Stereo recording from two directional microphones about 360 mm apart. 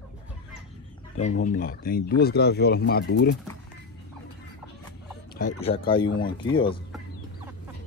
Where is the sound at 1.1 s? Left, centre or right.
Left.